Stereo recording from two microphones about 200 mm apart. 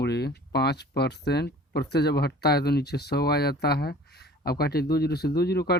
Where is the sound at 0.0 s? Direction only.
55° left (ahead or behind).